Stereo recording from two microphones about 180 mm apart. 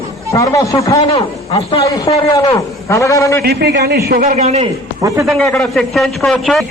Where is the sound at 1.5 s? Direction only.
30° left (ahead or behind).